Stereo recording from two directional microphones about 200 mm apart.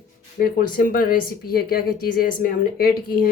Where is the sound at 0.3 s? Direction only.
45° left (ahead or behind).